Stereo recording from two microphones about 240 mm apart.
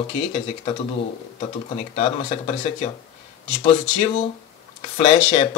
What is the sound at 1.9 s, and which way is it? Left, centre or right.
Speech, left.